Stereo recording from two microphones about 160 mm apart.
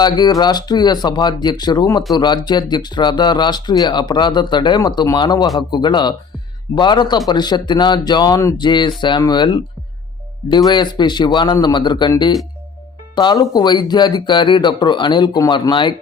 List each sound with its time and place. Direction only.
0.0 s speech: 25° left (ahead or behind)